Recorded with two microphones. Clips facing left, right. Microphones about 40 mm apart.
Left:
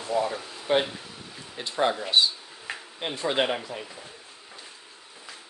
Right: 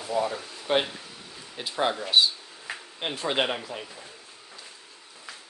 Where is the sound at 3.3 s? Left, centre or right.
Centre.